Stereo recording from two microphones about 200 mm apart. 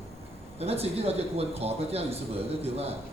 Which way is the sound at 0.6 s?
30° right (ahead or behind).